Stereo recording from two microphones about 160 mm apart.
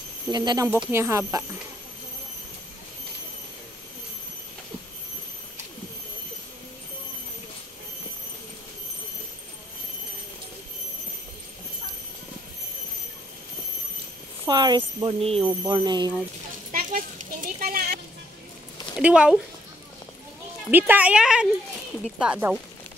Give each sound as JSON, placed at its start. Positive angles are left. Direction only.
{"t": 0.3, "sound": "speech", "side_deg": -25}
{"t": 14.4, "sound": "speech", "side_deg": -25}
{"t": 15.4, "sound": "speech", "side_deg": -25}
{"t": 16.7, "sound": "a sound", "side_deg": -60}
{"t": 18.9, "sound": "speech", "side_deg": -5}
{"t": 20.7, "sound": "speech", "side_deg": -10}